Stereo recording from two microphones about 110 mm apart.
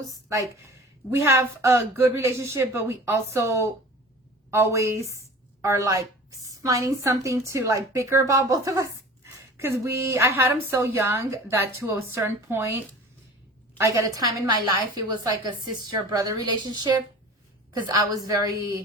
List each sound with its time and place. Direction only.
0.0 s a woman's voice: 30° right (ahead or behind)